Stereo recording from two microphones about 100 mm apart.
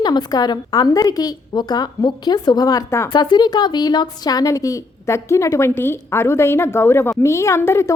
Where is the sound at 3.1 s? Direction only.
45° left (ahead or behind); by 7.9 s 25° left (ahead or behind).